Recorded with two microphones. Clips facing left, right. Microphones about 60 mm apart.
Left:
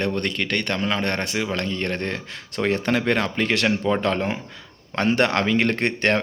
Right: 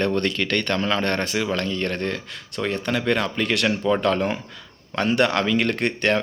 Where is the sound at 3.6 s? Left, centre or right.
Left.